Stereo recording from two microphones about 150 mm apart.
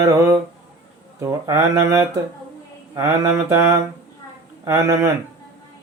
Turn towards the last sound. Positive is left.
turn(degrees=-20)  # may be behind; listen again after turning